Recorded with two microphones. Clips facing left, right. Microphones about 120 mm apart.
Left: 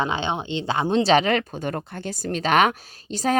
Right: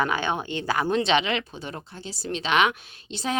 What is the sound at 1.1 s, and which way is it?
Speech, 45° left (ahead or behind).